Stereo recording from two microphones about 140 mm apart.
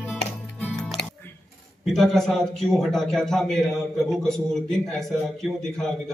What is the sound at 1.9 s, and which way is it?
A man's voice, 5° left (ahead or behind).